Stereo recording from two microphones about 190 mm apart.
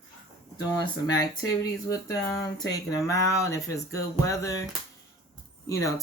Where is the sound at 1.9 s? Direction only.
15° left (ahead or behind).